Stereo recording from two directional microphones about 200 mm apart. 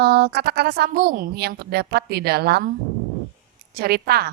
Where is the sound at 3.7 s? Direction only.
50° right (ahead or behind).